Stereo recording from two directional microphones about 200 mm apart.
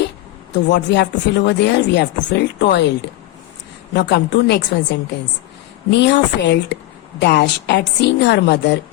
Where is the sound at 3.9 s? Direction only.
55° left (ahead or behind).